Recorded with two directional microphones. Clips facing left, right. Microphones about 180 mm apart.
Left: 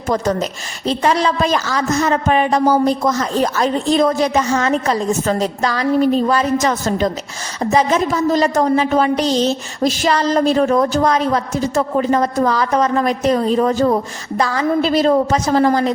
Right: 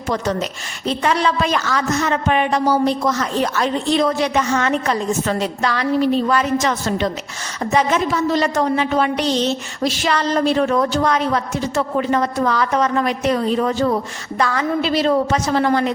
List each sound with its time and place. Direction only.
0.1 s a woman's voice: 40° left (ahead or behind)